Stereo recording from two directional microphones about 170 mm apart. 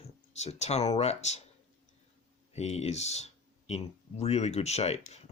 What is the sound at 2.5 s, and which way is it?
Speech, 40° left (ahead or behind).